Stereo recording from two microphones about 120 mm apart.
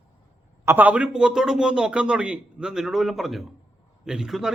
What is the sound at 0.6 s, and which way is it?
A man's voice, 15° right (ahead or behind).